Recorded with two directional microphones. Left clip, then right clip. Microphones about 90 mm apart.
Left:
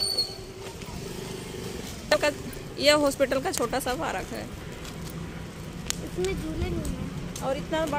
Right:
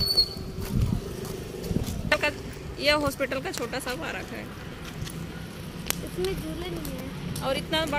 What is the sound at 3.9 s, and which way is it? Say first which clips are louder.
Speech: left 3 dB; 90° left.